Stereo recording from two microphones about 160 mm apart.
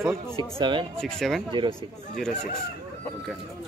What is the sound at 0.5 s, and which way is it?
Speech, 30° right (ahead or behind).